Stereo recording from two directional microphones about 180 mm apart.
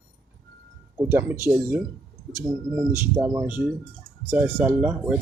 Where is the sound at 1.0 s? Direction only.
10° right (ahead or behind).